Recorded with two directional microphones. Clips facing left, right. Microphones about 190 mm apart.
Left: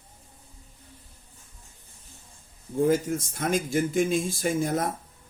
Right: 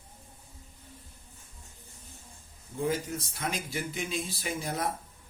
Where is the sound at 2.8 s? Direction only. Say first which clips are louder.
Left 8 dB; 50° left (ahead or behind).